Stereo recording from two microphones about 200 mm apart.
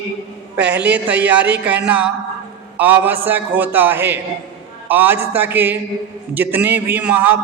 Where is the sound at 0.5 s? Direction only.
10° right (ahead or behind).